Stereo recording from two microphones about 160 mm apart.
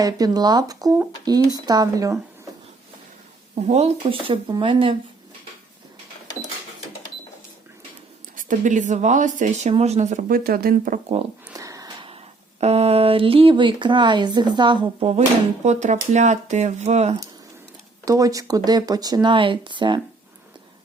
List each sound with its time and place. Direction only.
0.0 s speech: 25° right (ahead or behind)
3.5 s speech: 40° right (ahead or behind)
8.4 s speech: 55° right (ahead or behind)
11.5 s a sound: 20° right (ahead or behind)
12.0 s speech: 40° right (ahead or behind)
15.6 s speech: 45° right (ahead or behind)
18.0 s speech: 20° right (ahead or behind)